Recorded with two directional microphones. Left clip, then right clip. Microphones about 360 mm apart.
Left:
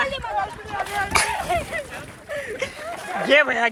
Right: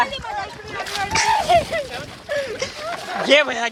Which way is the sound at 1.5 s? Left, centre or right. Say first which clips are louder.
Right 8 dB; right.